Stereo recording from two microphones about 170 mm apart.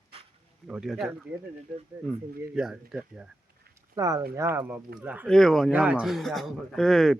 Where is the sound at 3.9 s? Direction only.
20° right (ahead or behind).